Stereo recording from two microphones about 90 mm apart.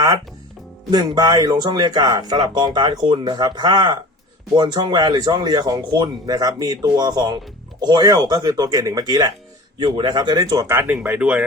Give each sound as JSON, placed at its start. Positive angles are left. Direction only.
{"t": 0.9, "sound": "speech", "side_deg": -50}
{"t": 9.7, "sound": "speech", "side_deg": -60}
{"t": 10.7, "sound": "speech", "side_deg": -25}